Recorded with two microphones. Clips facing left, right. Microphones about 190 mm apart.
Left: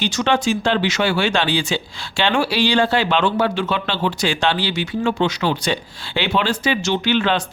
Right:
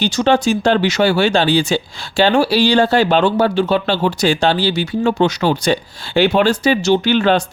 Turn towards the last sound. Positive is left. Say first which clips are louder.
# right 5 dB
turn(degrees=-40)  # may be behind; listen again after turning